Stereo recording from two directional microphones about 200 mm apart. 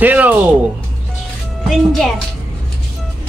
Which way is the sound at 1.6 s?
Centre (ahead or behind).